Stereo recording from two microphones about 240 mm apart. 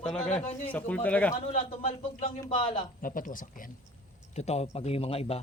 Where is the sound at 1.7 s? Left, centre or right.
Left.